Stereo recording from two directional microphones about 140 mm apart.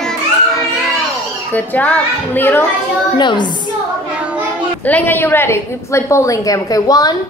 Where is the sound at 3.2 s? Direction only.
30° left (ahead or behind).